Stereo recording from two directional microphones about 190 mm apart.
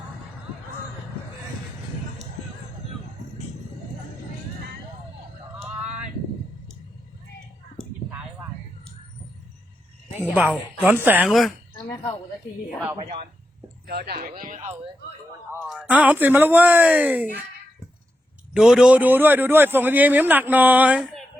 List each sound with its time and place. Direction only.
10.2 s a man's voice: 10° right (ahead or behind)
13.8 s speech: 55° right (ahead or behind)
15.6 s a man's voice: centre (ahead or behind)
18.5 s a man's voice: 5° right (ahead or behind)